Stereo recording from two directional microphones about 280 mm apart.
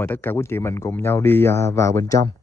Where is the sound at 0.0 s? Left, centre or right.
Centre.